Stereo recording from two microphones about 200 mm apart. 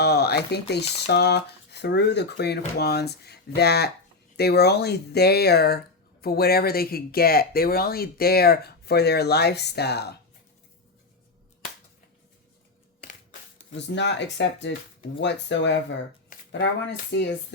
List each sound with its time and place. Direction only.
0.0 s speech: 55° left (ahead or behind)
13.7 s speech: 60° left (ahead or behind)
17.1 s speech: 55° left (ahead or behind)